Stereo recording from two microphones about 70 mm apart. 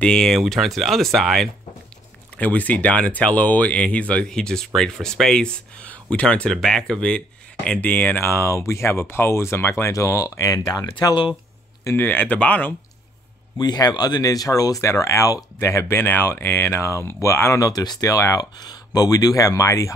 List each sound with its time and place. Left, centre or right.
0.0 s speech: centre
2.3 s speech: left; by 5.5 s centre
5.8 s speech: centre
7.8 s speech: left
12.0 s speech: left
13.6 s speech: left
16.0 s speech: left
18.4 s speech: left